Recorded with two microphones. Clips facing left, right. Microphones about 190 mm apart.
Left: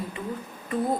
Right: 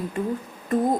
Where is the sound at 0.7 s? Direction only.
45° right (ahead or behind).